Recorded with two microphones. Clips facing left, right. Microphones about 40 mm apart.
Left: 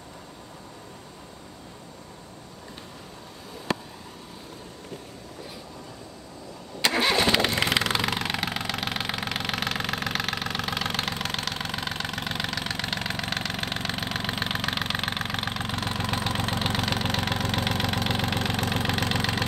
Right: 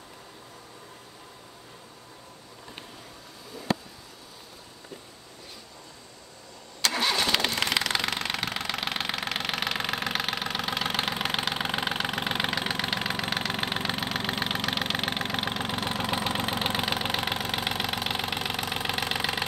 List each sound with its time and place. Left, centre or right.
6.8 s engine starting: left
7.5 s engine: centre
13.9 s engine: centre